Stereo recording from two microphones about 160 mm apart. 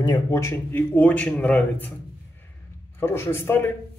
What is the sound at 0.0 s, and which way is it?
Speech, 25° left (ahead or behind).